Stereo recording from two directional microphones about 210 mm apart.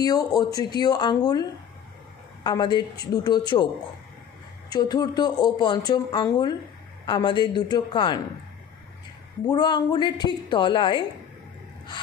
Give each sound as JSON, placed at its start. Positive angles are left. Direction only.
{"t": 0.0, "sound": "speech", "side_deg": 20}
{"t": 4.6, "sound": "speech", "side_deg": 20}
{"t": 9.5, "sound": "speech", "side_deg": 20}